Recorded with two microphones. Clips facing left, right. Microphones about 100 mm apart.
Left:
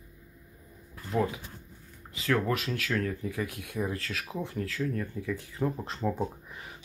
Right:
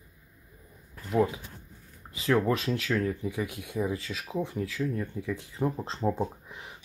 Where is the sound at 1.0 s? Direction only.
15° right (ahead or behind).